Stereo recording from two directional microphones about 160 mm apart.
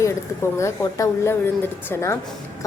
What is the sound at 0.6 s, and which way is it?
A woman's voice, 20° left (ahead or behind).